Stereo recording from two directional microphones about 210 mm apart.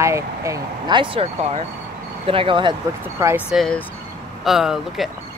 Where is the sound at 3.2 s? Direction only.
10° right (ahead or behind).